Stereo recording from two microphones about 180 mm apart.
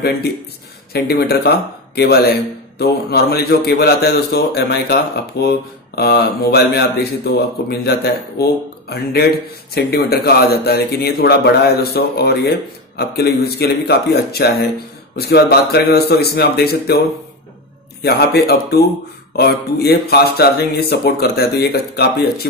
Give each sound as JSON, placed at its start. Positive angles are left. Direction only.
{"t": 0.9, "sound": "a man's voice", "side_deg": 60}
{"t": 18.0, "sound": "a man's voice", "side_deg": 65}